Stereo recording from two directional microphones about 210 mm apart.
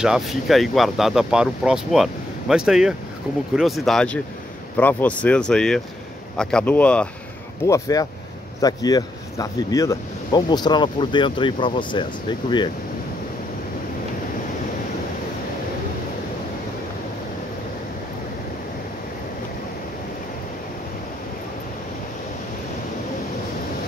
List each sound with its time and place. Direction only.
0.0 s speech: centre (ahead or behind)
7.6 s speech: 15° left (ahead or behind)